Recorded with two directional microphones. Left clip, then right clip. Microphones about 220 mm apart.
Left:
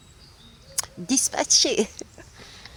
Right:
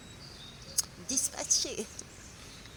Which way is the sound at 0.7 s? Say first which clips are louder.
Left 8 dB; 30° left (ahead or behind).